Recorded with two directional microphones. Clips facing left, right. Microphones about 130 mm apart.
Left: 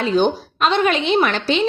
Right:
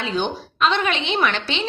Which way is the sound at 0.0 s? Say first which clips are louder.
Left 7 dB; 40° left (ahead or behind).